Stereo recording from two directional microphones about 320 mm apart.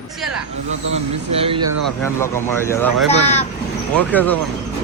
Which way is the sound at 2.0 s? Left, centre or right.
Centre.